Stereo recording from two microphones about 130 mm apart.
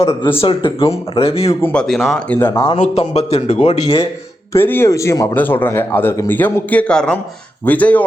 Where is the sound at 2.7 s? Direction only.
55° left (ahead or behind).